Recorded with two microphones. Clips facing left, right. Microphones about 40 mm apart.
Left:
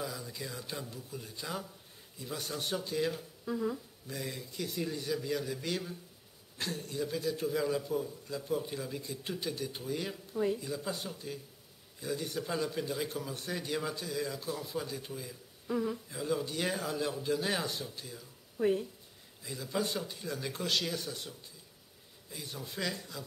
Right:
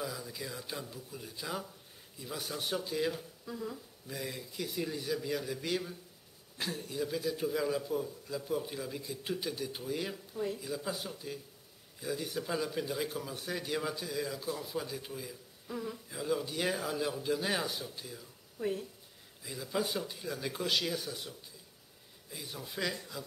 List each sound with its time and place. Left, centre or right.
0.0 s a man's voice: centre
3.4 s speech: centre
4.1 s a man's voice: centre
15.6 s speech: centre
16.1 s a man's voice: centre
18.6 s speech: centre
19.4 s a man's voice: centre